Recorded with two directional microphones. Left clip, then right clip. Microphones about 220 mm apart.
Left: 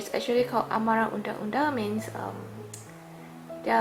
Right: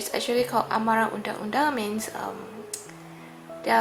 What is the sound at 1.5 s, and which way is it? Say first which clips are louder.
Speech: right 3 dB; 5° left (ahead or behind).